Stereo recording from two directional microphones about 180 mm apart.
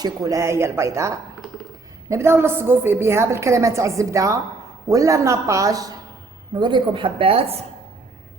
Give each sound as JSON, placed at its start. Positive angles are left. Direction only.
{"t": 0.0, "sound": "a woman's voice", "side_deg": -20}